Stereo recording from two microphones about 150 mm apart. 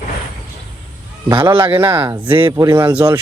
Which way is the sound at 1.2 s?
30° right (ahead or behind).